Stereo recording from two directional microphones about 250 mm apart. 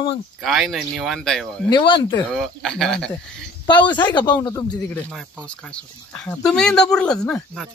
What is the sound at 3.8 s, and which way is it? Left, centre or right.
Speech, centre.